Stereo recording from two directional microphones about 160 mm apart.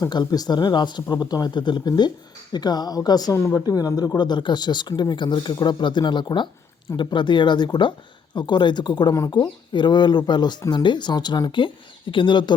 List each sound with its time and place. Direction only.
0.0 s speech: 25° left (ahead or behind)